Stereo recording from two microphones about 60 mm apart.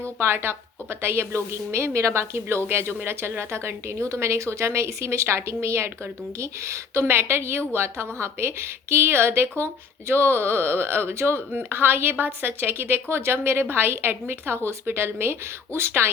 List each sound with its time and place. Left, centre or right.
0.0 s a woman's voice: right
7.0 s a woman's voice: right